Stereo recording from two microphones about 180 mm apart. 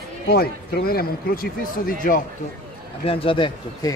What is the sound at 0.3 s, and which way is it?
Speech, 60° left (ahead or behind).